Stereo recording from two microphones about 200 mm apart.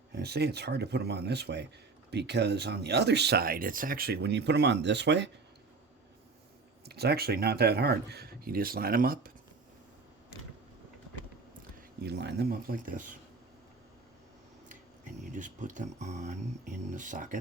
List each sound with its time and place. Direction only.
0.1 s speech: 55° right (ahead or behind)
6.8 s speech: 55° right (ahead or behind)
12.0 s speech: 55° right (ahead or behind)
15.2 s speech: 40° right (ahead or behind)